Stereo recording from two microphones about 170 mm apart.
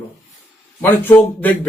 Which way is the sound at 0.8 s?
10° left (ahead or behind).